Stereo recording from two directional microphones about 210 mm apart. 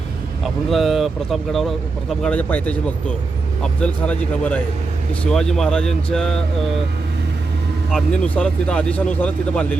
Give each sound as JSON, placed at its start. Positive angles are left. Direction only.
{"t": 0.4, "sound": "speech", "side_deg": 0}
{"t": 7.9, "sound": "speech", "side_deg": 5}